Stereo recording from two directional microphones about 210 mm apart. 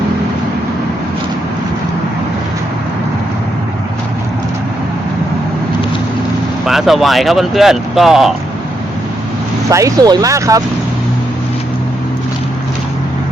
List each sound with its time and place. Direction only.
6.7 s speech: centre (ahead or behind)
9.6 s speech: 15° right (ahead or behind)